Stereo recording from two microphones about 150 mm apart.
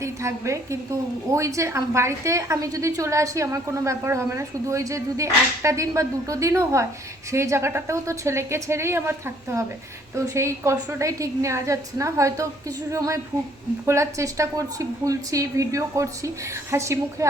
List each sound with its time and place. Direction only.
0.0 s a woman's voice: 20° right (ahead or behind)